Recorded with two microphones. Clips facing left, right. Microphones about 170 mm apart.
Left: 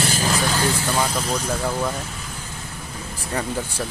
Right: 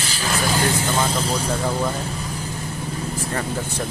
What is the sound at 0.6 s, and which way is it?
Speech, 20° right (ahead or behind).